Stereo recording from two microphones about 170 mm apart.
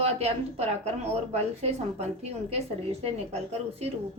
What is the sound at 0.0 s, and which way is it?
A woman's voice, 40° right (ahead or behind).